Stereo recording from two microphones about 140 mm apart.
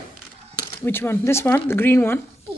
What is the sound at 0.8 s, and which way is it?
Speech, 15° left (ahead or behind).